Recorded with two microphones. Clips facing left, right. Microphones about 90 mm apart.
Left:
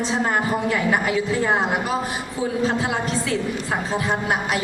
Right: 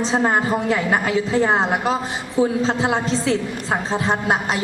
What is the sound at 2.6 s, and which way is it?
A woman's voice, 25° right (ahead or behind).